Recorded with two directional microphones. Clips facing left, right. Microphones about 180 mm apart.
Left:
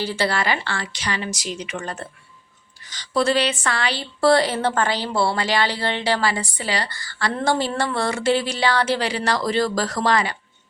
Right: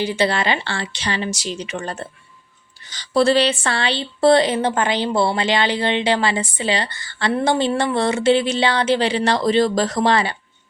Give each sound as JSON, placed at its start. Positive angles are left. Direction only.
{"t": 0.0, "sound": "speech", "side_deg": -20}